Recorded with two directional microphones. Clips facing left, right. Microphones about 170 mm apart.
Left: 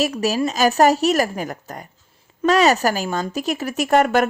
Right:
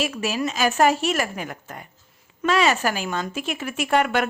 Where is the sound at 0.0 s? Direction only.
40° left (ahead or behind).